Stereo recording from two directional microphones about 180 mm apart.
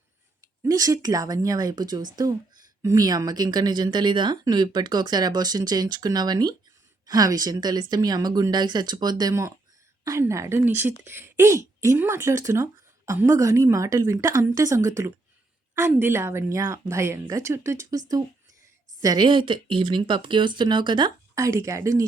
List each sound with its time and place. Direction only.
0.6 s speech: 20° right (ahead or behind)